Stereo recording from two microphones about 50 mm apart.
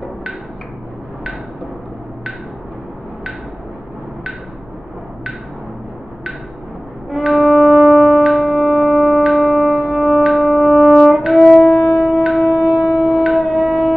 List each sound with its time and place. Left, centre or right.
7.1 s music: centre
8.3 s shofar: centre
11.1 s brass instrument: centre
11.5 s shofar: centre
13.3 s shofar: centre